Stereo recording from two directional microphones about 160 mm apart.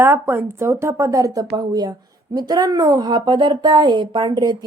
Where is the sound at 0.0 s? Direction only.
15° right (ahead or behind).